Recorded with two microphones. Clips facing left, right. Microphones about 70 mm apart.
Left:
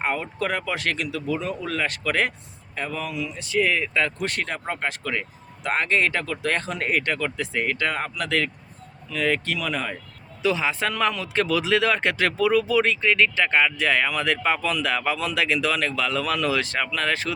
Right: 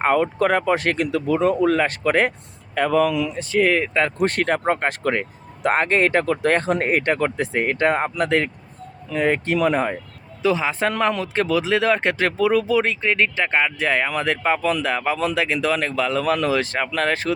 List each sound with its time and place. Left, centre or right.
0.0 s speech: right
2.7 s speech: right
3.3 s speech: right
4.4 s speech: right